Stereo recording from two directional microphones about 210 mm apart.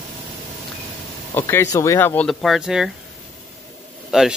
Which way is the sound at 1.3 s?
10° left (ahead or behind).